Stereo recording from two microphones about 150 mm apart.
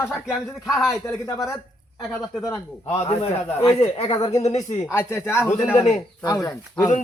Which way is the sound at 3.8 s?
40° left (ahead or behind).